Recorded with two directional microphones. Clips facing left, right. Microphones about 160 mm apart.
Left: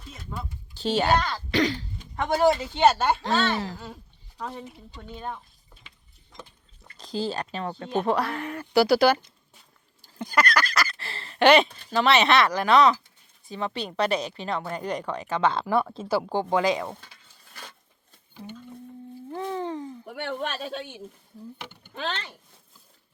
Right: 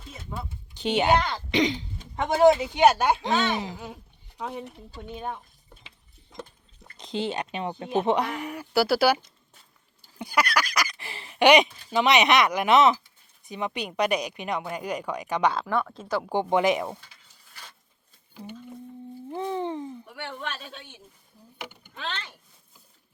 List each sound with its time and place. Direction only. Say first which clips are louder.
0.3 s speech: even; 20° right (ahead or behind)
6.9 s speech: even; 20° right (ahead or behind)
15.5 s speech: left 3 dB; 5° left (ahead or behind)
15.8 s speech: left 3 dB; 25° left (ahead or behind)
16.0 s speech: left 3 dB; 5° left (ahead or behind)
16.3 s speech: right 3 dB; 20° right (ahead or behind)
19.3 s speech: right 1 dB; 20° right (ahead or behind)
21.6 s speech: right 2 dB; 15° right (ahead or behind)
21.9 s speech: left 4 dB; 35° left (ahead or behind)